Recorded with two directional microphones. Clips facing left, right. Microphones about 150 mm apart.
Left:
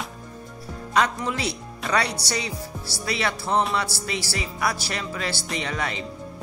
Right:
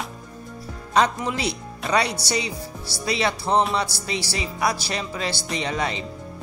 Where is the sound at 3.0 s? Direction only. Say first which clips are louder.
Right 3 dB; 20° right (ahead or behind).